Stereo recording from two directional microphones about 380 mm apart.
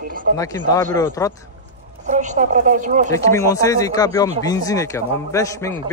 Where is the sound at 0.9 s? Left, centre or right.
Centre.